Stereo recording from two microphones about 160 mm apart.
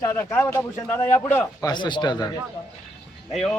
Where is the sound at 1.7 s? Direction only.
30° left (ahead or behind).